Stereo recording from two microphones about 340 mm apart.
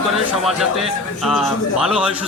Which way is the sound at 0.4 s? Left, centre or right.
Centre.